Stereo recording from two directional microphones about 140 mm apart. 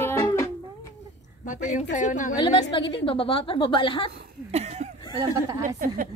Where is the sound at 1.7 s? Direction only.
60° left (ahead or behind).